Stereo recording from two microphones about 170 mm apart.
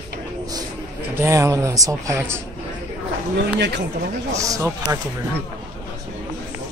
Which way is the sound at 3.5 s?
85° right.